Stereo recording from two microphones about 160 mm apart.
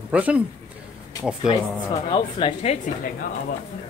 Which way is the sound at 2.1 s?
30° left (ahead or behind).